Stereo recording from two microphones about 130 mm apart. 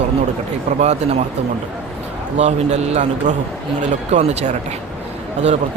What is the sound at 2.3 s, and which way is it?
Speech, 60° right (ahead or behind).